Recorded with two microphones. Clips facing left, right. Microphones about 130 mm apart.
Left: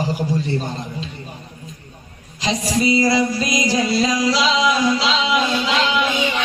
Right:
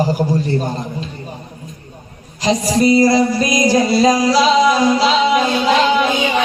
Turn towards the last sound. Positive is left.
turn(degrees=-45)  # may be behind; listen again after turning